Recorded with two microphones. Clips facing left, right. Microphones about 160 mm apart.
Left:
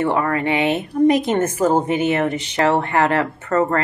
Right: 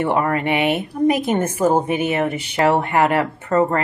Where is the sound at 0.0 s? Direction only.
20° right (ahead or behind).